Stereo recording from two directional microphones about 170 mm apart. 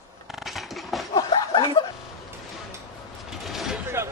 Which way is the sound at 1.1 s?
25° left (ahead or behind).